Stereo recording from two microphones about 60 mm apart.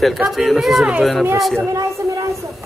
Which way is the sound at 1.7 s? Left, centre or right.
Right.